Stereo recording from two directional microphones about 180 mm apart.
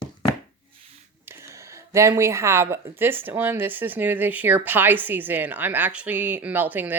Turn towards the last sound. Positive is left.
turn(degrees=-10)  # may be behind; listen again after turning